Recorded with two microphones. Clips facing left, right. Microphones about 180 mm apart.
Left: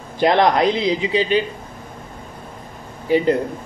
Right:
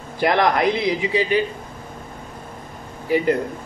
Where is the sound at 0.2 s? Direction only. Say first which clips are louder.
Left 3 dB; 25° left (ahead or behind).